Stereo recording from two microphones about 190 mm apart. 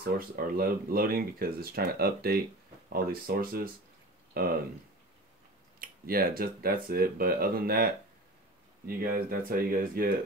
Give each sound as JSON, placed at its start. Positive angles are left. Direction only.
{"t": 0.0, "sound": "speech", "side_deg": -50}
{"t": 5.8, "sound": "speech", "side_deg": -50}